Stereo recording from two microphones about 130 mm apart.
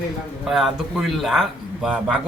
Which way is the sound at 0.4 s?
5° right (ahead or behind).